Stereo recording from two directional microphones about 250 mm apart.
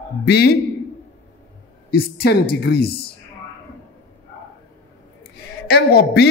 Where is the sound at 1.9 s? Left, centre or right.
Left.